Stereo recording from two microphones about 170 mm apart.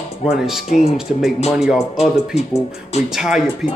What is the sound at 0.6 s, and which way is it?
Speech, 40° left (ahead or behind).